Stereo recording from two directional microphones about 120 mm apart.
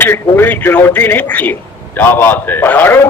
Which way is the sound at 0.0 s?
20° left (ahead or behind).